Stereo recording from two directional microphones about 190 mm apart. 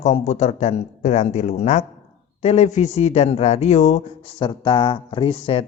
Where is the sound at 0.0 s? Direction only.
35° left (ahead or behind).